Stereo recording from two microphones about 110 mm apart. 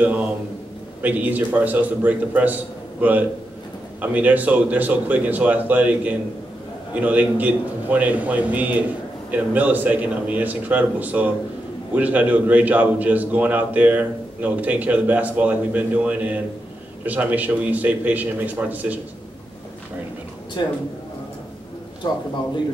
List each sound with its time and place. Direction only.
1.0 s a man's voice: 15° right (ahead or behind)
20.6 s a man's voice: 40° left (ahead or behind)
22.0 s a man's voice: 35° left (ahead or behind)